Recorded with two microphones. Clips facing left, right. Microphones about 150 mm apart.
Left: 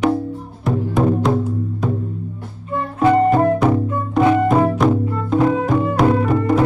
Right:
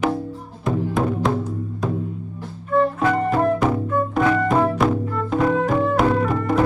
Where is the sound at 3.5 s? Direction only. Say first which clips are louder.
Left 3 dB; centre (ahead or behind).